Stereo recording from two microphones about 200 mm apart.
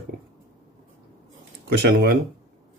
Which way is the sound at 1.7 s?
55° right (ahead or behind).